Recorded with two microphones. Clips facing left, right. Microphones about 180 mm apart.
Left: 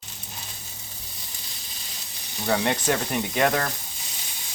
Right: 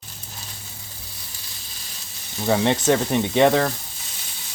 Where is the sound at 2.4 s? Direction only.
15° right (ahead or behind).